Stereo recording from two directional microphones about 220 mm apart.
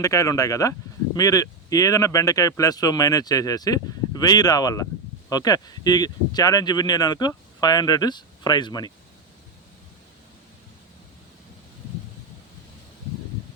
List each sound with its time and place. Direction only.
0.0 s speech: 15° left (ahead or behind)